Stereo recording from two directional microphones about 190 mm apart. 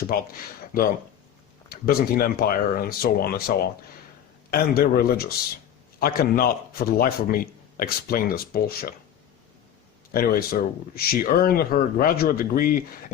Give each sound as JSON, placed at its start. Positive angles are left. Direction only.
{"t": 0.1, "sound": "a man's voice", "side_deg": 50}
{"t": 1.7, "sound": "a man's voice", "side_deg": 50}
{"t": 10.1, "sound": "a man's voice", "side_deg": 50}